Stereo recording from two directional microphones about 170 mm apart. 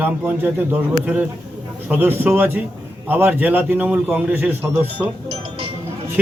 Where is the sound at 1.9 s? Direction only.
10° right (ahead or behind).